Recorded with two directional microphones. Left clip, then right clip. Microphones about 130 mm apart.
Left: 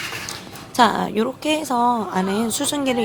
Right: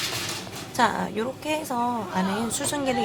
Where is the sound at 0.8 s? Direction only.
60° left (ahead or behind).